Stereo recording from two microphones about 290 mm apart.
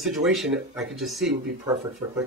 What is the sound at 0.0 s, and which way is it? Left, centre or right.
Speech, centre.